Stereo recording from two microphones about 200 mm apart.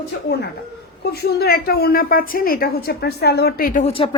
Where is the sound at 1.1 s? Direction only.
50° left (ahead or behind).